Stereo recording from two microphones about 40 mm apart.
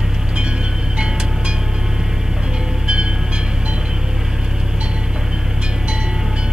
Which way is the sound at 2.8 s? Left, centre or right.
Right.